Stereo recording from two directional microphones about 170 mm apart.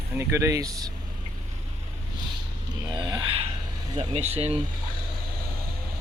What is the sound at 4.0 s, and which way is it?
Speech, 40° right (ahead or behind).